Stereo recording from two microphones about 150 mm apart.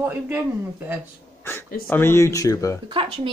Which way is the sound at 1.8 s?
15° left (ahead or behind).